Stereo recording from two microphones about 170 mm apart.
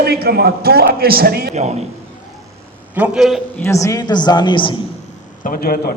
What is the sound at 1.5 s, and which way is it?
Speech, 40° right (ahead or behind).